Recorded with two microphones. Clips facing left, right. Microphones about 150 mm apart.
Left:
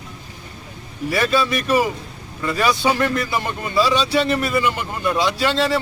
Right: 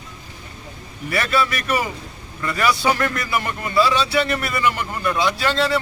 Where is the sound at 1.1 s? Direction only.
25° left (ahead or behind).